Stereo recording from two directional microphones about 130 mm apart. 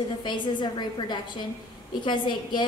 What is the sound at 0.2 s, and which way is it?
A woman's voice, 35° left (ahead or behind).